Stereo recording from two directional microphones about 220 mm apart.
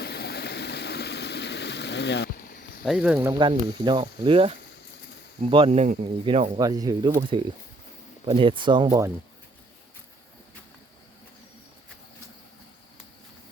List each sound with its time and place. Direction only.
0.0 s vehicle: 45° left (ahead or behind)
2.8 s speech: centre (ahead or behind)
3.3 s speech: 20° right (ahead or behind)
6.6 s speech: 15° right (ahead or behind)